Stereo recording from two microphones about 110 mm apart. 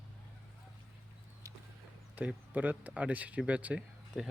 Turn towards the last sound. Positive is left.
turn(degrees=-10)  # may be behind; listen again after turning